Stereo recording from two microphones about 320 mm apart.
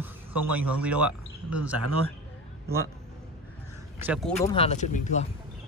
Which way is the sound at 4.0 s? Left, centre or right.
Centre.